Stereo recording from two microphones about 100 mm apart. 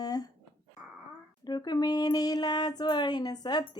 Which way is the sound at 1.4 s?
45° left (ahead or behind).